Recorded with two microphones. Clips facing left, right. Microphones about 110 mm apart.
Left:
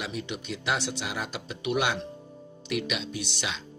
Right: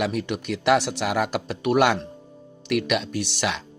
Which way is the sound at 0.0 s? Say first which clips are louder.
Right 9 dB; 60° right (ahead or behind).